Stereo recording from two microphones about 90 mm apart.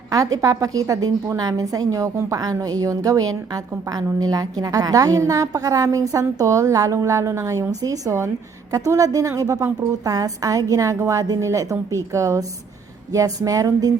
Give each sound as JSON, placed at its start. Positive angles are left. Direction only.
{"t": 0.1, "sound": "a woman's voice", "side_deg": -40}